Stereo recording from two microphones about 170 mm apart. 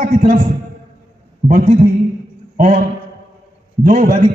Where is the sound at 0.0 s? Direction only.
50° right (ahead or behind).